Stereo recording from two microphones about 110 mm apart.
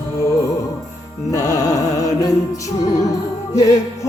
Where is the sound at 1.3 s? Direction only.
30° left (ahead or behind).